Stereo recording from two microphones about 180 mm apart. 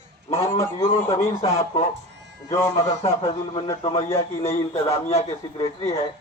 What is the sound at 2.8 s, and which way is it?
Speech, 15° left (ahead or behind).